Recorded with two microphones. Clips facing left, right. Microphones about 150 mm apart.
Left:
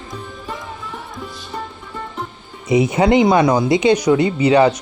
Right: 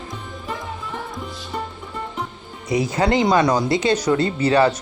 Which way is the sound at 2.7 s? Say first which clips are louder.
Left 5 dB; 20° left (ahead or behind).